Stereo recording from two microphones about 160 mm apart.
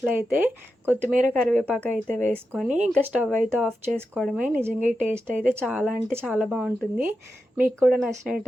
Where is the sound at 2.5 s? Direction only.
5° right (ahead or behind).